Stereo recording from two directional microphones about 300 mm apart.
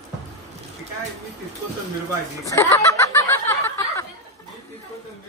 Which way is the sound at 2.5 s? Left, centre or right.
Centre.